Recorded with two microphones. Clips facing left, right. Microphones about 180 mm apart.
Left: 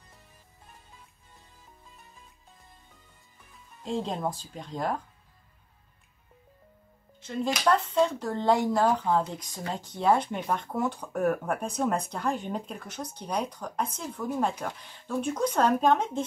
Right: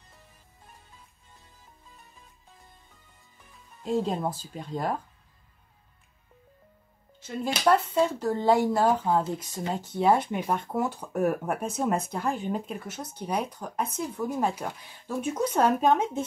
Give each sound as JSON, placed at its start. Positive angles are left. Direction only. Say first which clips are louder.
{"t": 3.8, "sound": "speech", "louder": "right 3 dB", "side_deg": -5}
{"t": 7.2, "sound": "speech", "louder": "right 1 dB", "side_deg": -5}
{"t": 9.2, "sound": "speech", "louder": "right 3 dB", "side_deg": -20}
{"t": 9.8, "sound": "speech", "louder": "right 1 dB", "side_deg": -10}